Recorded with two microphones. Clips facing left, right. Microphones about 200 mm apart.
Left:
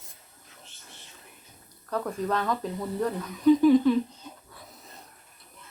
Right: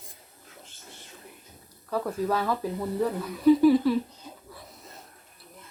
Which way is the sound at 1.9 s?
5° right (ahead or behind).